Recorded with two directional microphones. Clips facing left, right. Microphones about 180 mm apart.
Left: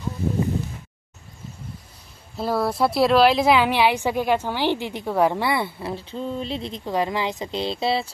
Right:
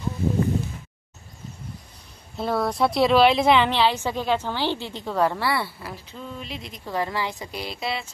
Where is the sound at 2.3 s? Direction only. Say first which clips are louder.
Left 1 dB; centre (ahead or behind).